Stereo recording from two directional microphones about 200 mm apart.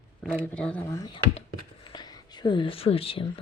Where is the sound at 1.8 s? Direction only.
20° left (ahead or behind).